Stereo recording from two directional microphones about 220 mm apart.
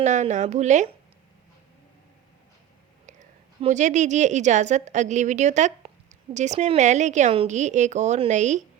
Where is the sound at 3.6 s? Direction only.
35° right (ahead or behind).